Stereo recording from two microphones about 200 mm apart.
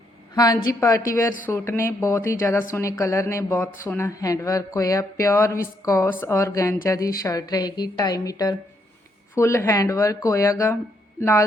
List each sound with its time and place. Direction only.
0.3 s speech: 20° left (ahead or behind)